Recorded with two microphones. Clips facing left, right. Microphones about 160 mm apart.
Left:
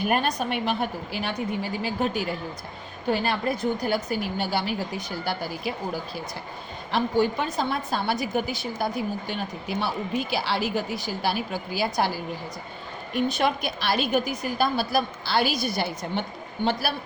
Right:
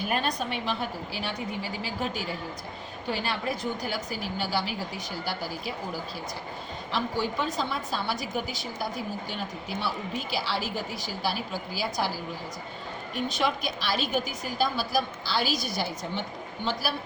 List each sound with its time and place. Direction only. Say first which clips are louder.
0.0 s a woman's voice: left 4 dB; 55° left (ahead or behind)
6.9 s a woman's voice: left 6 dB; 60° left (ahead or behind)